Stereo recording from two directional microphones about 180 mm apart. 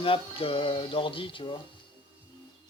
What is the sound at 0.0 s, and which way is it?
Speech, 30° left (ahead or behind).